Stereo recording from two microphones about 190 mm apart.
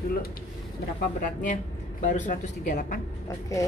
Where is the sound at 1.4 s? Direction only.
40° left (ahead or behind).